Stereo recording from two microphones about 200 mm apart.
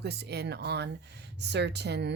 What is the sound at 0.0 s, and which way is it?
Speech, 55° right (ahead or behind).